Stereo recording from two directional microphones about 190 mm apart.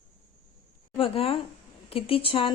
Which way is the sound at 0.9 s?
30° left (ahead or behind).